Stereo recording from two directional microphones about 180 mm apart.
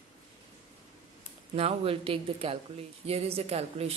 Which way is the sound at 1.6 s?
35° right (ahead or behind).